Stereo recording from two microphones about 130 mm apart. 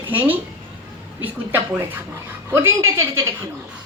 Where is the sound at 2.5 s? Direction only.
20° right (ahead or behind).